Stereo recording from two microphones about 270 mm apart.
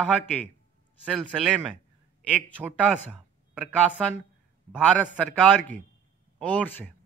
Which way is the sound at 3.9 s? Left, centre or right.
Centre.